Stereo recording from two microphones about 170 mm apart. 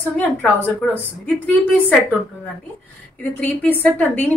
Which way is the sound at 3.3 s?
10° left (ahead or behind).